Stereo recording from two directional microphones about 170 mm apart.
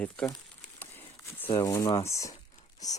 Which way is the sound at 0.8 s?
10° left (ahead or behind).